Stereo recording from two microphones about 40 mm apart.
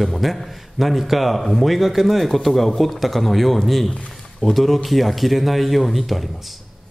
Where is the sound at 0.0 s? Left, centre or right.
Centre.